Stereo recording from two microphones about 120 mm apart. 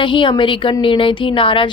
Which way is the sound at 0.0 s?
45° left (ahead or behind).